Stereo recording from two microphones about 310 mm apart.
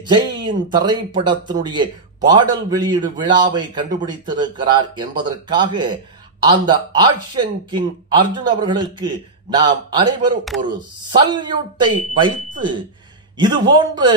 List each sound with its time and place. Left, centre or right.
0.0 s a man's voice: centre